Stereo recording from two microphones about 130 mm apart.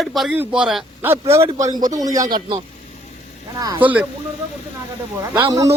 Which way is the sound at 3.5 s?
30° right (ahead or behind).